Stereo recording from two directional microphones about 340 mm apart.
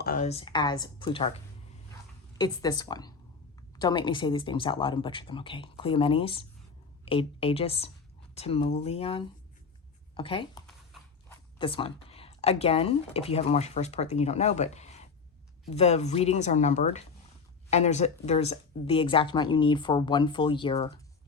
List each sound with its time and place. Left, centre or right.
0.0 s speech: left
2.4 s speech: centre
10.9 s horse: centre
11.3 s speech: centre